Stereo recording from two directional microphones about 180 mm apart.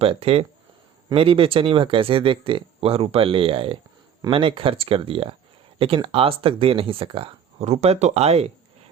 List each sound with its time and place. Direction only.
0.0 s speech: 30° right (ahead or behind)